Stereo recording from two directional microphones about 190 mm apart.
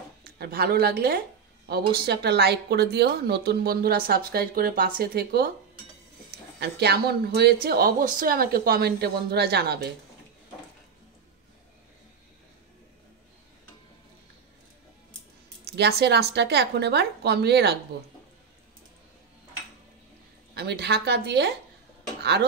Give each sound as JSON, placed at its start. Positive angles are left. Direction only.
{"t": 0.2, "sound": "a woman's voice", "side_deg": -55}
{"t": 15.6, "sound": "a woman's voice", "side_deg": -60}
{"t": 20.5, "sound": "a woman's voice", "side_deg": -60}